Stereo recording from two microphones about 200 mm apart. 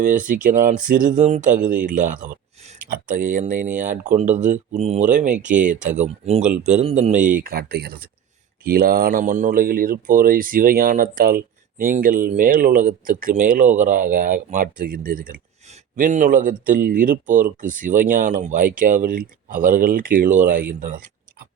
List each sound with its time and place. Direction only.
0.0 s speech: 40° right (ahead or behind)
6.7 s speech: 35° right (ahead or behind)
20.7 s a sound: 40° right (ahead or behind)